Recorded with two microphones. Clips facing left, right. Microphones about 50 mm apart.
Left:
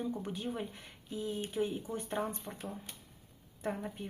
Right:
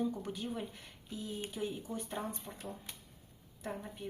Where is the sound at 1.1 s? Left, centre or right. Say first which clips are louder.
Left 4 dB; left.